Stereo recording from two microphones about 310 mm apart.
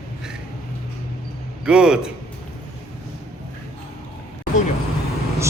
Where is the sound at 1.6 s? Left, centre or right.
Centre.